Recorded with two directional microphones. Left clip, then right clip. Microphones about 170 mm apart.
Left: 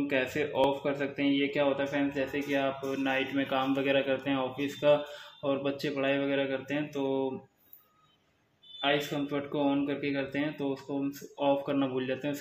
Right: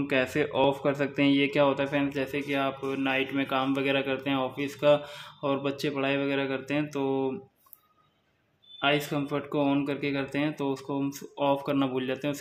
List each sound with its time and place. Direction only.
0.0 s speech: 30° right (ahead or behind)
8.8 s speech: 30° right (ahead or behind)